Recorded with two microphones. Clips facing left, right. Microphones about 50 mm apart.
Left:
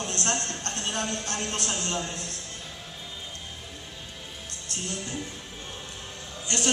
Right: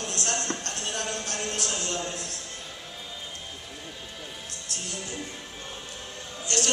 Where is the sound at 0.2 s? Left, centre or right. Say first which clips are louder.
Right 1 dB; left.